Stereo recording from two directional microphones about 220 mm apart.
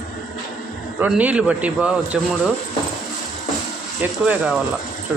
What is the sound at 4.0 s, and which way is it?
Speech, 5° right (ahead or behind).